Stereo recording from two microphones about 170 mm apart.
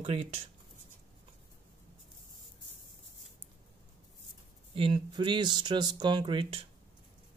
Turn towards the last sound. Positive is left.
turn(degrees=-30)  # may be behind; listen again after turning